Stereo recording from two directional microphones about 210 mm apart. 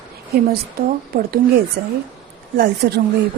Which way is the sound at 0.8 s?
45° right (ahead or behind).